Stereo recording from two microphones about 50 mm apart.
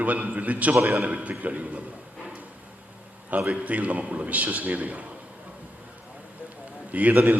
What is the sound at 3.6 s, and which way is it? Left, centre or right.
A man's voice, right.